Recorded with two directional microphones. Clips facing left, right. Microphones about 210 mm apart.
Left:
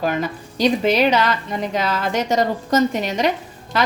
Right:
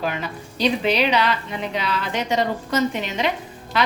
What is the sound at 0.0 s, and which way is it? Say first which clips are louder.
A woman's voice: left 5 dB; 40° left (ahead or behind).